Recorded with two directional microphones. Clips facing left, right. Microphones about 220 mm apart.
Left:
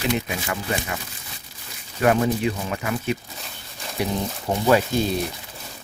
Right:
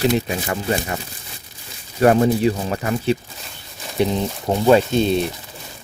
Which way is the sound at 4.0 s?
25° right (ahead or behind).